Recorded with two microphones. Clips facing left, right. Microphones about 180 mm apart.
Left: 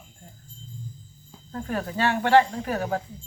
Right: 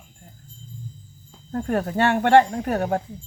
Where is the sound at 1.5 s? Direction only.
50° right (ahead or behind).